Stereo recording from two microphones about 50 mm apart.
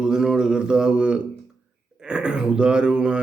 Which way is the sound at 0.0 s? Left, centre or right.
Centre.